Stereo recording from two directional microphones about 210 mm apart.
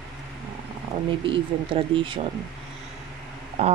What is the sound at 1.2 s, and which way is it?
Speech, 25° right (ahead or behind).